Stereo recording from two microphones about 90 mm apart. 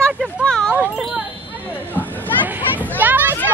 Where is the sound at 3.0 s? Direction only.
20° right (ahead or behind).